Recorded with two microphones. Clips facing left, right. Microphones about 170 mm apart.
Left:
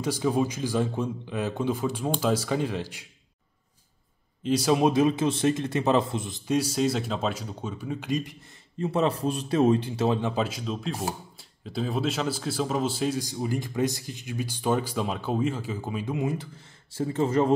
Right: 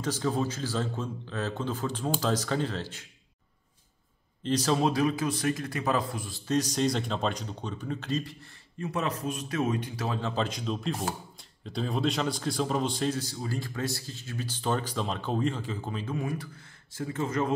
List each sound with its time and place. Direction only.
0.0 s speech: 10° left (ahead or behind)
4.4 s speech: 10° left (ahead or behind)
10.3 s speech: 5° left (ahead or behind); by 17.6 s 30° left (ahead or behind)